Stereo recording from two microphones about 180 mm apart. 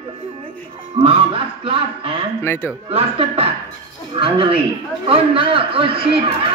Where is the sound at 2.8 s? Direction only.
30° right (ahead or behind).